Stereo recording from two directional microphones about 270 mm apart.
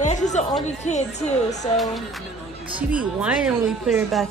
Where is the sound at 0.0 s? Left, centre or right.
Left.